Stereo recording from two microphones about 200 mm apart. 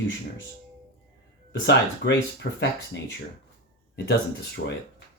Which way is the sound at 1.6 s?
65° left (ahead or behind).